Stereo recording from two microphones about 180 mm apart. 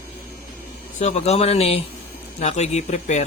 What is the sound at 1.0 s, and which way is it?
A man's voice, 40° left (ahead or behind).